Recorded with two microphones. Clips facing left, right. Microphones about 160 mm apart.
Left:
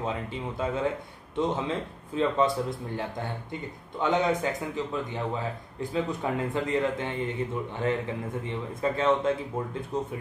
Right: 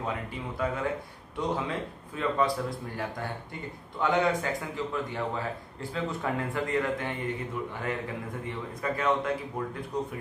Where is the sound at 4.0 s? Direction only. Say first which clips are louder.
Left 1 dB; 20° left (ahead or behind).